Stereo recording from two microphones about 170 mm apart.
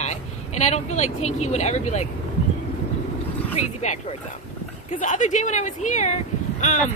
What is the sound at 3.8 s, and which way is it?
Speech, 45° left (ahead or behind).